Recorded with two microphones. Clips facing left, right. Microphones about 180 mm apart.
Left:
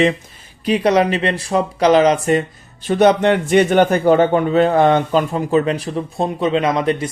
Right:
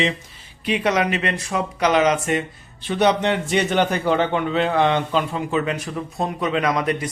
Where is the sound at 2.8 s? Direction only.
45° left (ahead or behind).